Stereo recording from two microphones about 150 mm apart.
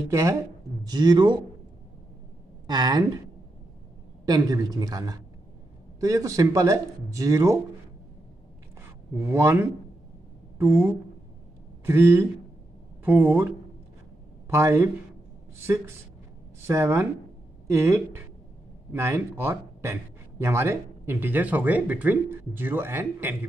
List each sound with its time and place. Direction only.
0.1 s speech: 20° right (ahead or behind)
2.6 s a woman's voice: 25° right (ahead or behind)
4.3 s speech: 25° right (ahead or behind)
9.2 s a man's voice: 15° right (ahead or behind)
14.5 s a man's voice: 15° right (ahead or behind)
16.6 s a man's voice: 15° right (ahead or behind)